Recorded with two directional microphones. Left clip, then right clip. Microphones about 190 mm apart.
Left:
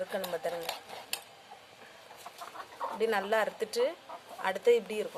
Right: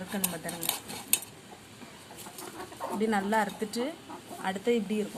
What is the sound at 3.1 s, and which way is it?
Speech, 50° left (ahead or behind).